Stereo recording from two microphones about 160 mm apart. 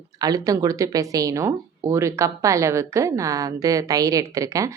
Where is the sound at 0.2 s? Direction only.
25° right (ahead or behind).